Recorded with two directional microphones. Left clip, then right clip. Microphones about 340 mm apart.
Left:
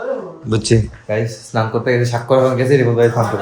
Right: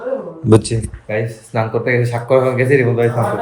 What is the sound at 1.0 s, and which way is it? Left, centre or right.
A man's voice, centre.